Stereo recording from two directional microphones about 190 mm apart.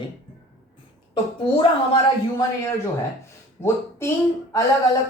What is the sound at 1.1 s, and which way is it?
Speech, 25° left (ahead or behind).